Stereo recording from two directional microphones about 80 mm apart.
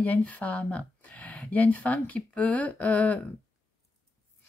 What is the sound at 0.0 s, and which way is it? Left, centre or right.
Speech, centre.